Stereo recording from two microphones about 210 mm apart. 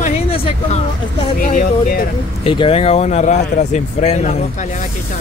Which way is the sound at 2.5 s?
25° left (ahead or behind).